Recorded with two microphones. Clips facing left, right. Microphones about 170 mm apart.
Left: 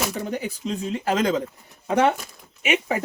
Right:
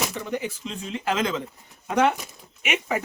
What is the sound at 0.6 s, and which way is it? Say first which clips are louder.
Speech: left 4 dB; 40° left (ahead or behind).